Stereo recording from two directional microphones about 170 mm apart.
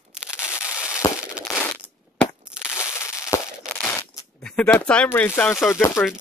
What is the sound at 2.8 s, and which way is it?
Crushing, 15° left (ahead or behind).